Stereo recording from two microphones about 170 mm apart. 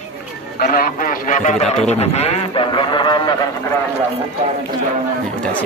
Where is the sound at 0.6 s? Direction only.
60° left (ahead or behind).